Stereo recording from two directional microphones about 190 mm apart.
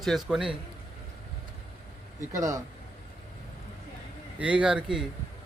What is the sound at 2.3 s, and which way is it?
Speech, 20° right (ahead or behind).